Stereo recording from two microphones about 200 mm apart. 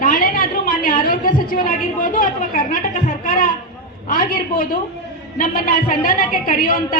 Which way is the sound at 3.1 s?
45° left (ahead or behind).